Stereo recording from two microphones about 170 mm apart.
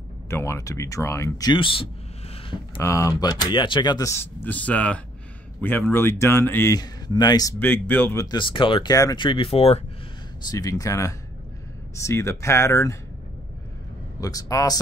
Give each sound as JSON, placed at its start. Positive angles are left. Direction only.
{"t": 0.3, "sound": "speech", "side_deg": 15}
{"t": 2.8, "sound": "speech", "side_deg": 20}
{"t": 7.5, "sound": "speech", "side_deg": 10}
{"t": 8.3, "sound": "speech", "side_deg": 30}
{"t": 10.4, "sound": "speech", "side_deg": 20}
{"t": 14.2, "sound": "speech", "side_deg": 20}